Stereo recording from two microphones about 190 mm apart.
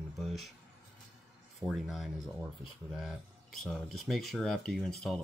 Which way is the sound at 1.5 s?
Centre (ahead or behind).